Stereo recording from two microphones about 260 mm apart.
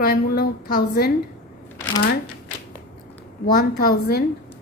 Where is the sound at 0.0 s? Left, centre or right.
Left.